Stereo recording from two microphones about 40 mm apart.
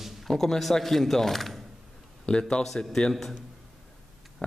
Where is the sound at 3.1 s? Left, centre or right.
Centre.